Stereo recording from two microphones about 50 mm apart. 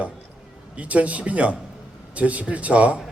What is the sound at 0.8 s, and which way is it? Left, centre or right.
A man's voice, right.